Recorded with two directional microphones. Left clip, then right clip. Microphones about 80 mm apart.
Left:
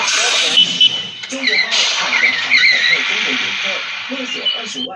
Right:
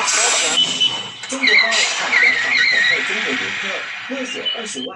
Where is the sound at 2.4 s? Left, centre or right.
Left.